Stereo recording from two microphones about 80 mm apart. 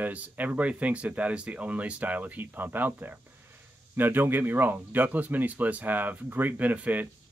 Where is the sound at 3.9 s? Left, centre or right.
Right.